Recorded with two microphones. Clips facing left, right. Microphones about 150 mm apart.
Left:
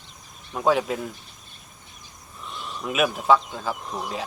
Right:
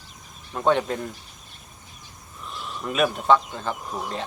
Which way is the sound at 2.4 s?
Centre (ahead or behind).